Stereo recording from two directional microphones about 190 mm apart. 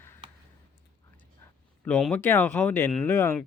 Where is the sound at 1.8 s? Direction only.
5° left (ahead or behind).